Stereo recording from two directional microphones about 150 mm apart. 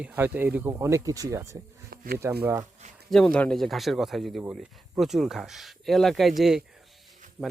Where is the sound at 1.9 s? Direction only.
80° right.